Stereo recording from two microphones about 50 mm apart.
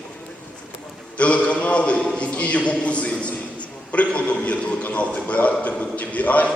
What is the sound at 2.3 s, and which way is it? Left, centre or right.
A man's voice, left.